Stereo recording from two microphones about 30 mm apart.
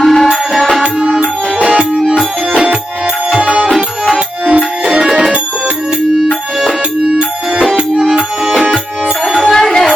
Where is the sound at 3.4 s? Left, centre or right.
Right.